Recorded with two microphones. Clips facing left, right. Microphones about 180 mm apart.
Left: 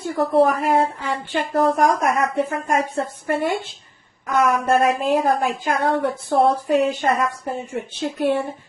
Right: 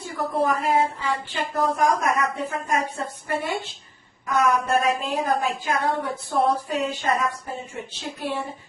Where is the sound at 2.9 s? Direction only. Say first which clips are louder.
Left 6 dB; 55° left (ahead or behind).